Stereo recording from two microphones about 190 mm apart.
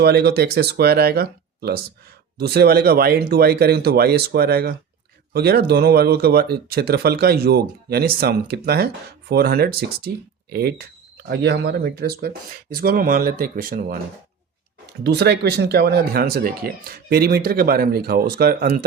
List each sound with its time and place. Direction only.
0.0 s speech: 55° right (ahead or behind)
15.0 s speech: 60° right (ahead or behind)